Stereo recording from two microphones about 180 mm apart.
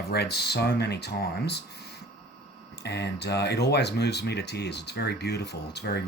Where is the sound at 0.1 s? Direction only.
65° left (ahead or behind).